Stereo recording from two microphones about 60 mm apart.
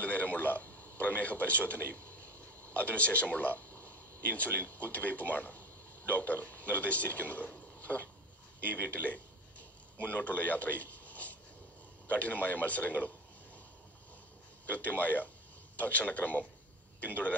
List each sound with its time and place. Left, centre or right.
0.0 s a sound: left
2.7 s a man's voice: left
14.7 s a man's voice: left